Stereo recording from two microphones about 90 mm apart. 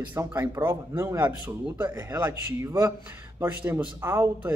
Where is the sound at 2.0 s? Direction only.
40° right (ahead or behind).